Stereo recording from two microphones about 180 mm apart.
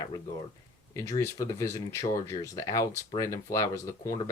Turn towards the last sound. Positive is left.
turn(degrees=15)  # may be behind; listen again after turning